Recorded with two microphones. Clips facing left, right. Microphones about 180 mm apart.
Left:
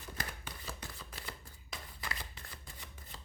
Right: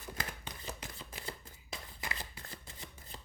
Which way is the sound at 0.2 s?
20° right (ahead or behind).